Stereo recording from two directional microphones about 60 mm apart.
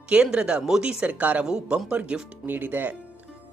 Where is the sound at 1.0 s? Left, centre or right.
Right.